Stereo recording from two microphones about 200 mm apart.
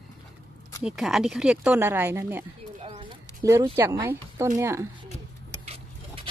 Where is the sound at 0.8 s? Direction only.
Centre (ahead or behind).